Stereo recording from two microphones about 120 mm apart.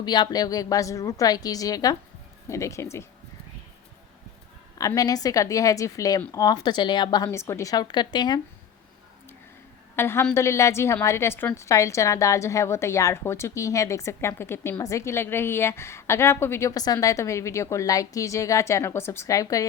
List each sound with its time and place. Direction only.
0.0 s a woman's voice: 35° left (ahead or behind)
4.8 s a woman's voice: 30° left (ahead or behind)
7.3 s a woman's voice: 20° left (ahead or behind)
9.9 s a woman's voice: 20° left (ahead or behind)